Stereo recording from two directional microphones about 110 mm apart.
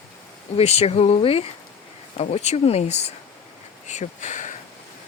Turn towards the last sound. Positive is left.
turn(degrees=90)